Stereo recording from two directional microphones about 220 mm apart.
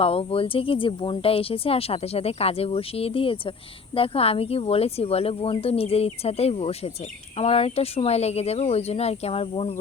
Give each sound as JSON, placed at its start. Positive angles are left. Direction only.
{"t": 0.0, "sound": "speech", "side_deg": 25}